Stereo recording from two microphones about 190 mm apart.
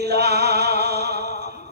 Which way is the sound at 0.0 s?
60° right (ahead or behind).